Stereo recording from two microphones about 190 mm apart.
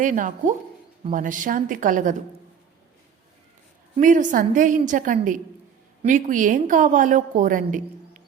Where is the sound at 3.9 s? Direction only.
40° right (ahead or behind).